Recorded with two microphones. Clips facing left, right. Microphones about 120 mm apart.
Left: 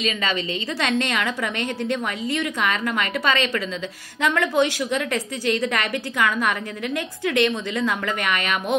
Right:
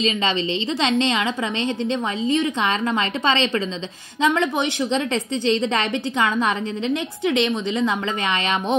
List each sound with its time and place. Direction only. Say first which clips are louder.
0.0 s a woman's voice: right 3 dB; 25° right (ahead or behind)